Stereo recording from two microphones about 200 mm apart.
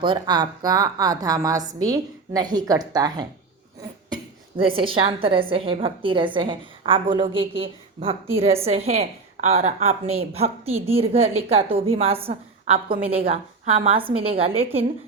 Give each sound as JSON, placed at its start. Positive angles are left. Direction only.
{"t": 0.0, "sound": "a woman's voice", "side_deg": -25}
{"t": 4.1, "sound": "cough", "side_deg": -25}
{"t": 4.8, "sound": "a woman's voice", "side_deg": -25}